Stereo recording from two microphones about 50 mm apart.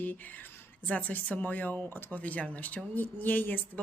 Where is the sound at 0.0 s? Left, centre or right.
Left.